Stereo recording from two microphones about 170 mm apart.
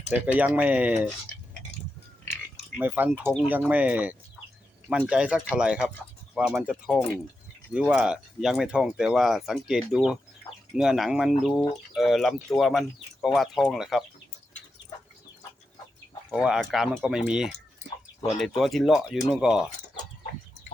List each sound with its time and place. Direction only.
0.1 s speech: 10° right (ahead or behind)
2.7 s speech: 10° right (ahead or behind)
16.3 s speech: 5° right (ahead or behind)